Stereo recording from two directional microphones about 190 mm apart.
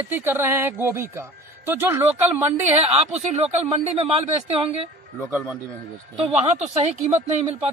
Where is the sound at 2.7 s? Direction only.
30° right (ahead or behind).